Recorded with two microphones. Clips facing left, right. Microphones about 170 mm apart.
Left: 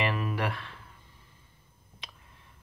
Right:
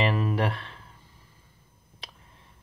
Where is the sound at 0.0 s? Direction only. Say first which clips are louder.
Right 4 dB; 30° right (ahead or behind).